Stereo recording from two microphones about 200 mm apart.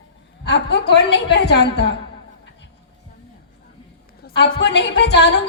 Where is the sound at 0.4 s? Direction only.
60° left (ahead or behind).